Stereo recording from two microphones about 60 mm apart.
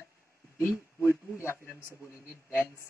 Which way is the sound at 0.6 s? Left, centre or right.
Left.